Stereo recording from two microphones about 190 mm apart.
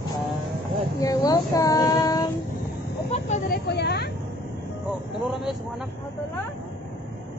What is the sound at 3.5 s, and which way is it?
Speech, 60° left (ahead or behind).